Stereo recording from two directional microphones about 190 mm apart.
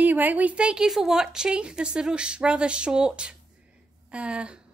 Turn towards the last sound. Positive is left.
turn(degrees=-5)  # may be behind; listen again after turning